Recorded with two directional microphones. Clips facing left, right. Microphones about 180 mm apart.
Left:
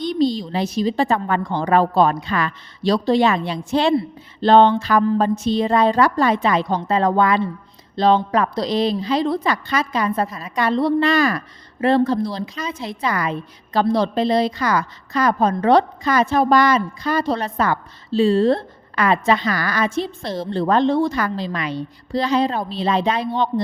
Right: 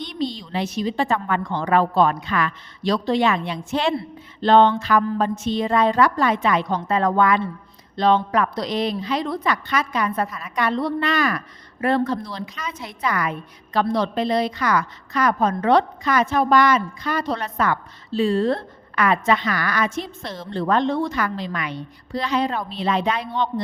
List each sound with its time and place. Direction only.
0.0 s a woman's voice: 35° left (ahead or behind)